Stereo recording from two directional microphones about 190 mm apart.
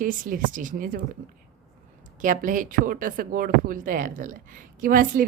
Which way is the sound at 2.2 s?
45° right (ahead or behind).